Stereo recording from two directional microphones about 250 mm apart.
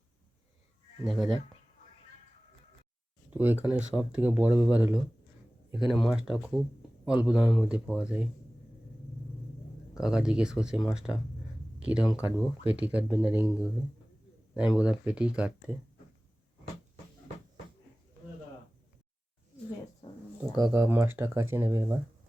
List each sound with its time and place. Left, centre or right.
1.0 s speech: centre
3.2 s speech: centre
9.9 s speech: centre
20.0 s a sound: left
20.4 s speech: centre